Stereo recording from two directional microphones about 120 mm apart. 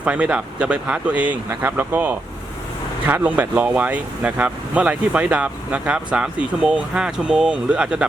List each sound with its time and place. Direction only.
0.0 s speech: 10° right (ahead or behind)